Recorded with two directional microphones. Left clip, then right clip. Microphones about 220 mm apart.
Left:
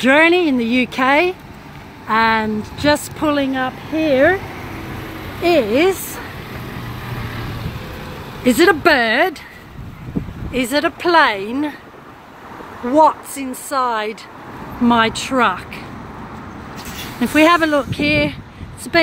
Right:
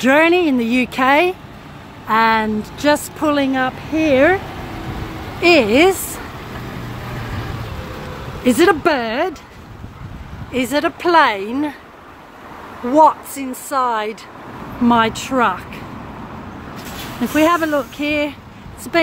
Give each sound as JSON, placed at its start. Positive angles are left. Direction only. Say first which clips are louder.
{"t": 0.0, "sound": "speech", "louder": "left 1 dB", "side_deg": 5}
{"t": 5.4, "sound": "speech", "louder": "right 3 dB", "side_deg": -10}
{"t": 8.5, "sound": "speech", "louder": "left 1 dB", "side_deg": 5}
{"t": 10.5, "sound": "speech", "louder": "even", "side_deg": 0}
{"t": 12.9, "sound": "speech", "louder": "right 1 dB", "side_deg": 0}
{"t": 17.2, "sound": "speech", "louder": "left 3 dB", "side_deg": 15}